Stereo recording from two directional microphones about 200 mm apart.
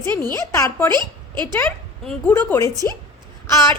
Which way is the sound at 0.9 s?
20° right (ahead or behind).